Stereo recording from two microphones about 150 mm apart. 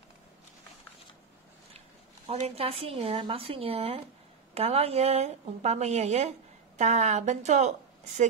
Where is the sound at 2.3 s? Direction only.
45° right (ahead or behind).